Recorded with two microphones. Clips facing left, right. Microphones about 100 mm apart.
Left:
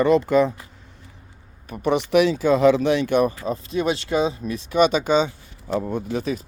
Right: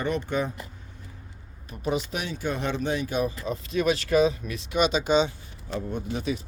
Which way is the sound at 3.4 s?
35° left (ahead or behind).